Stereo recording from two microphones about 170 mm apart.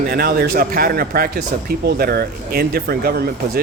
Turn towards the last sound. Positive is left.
turn(degrees=-65)  # may be behind; listen again after turning